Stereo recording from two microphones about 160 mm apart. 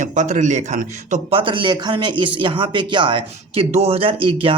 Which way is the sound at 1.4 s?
30° right (ahead or behind).